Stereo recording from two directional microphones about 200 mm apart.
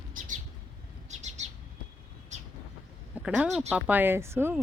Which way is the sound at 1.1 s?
35° right (ahead or behind).